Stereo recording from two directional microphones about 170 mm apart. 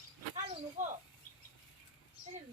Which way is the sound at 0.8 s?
45° right (ahead or behind).